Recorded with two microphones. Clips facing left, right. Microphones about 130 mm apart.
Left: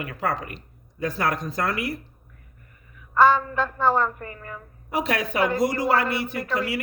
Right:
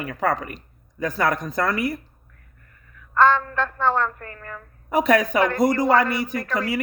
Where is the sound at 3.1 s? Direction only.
10° left (ahead or behind).